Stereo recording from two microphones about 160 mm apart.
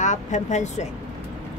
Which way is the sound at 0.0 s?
50° left (ahead or behind).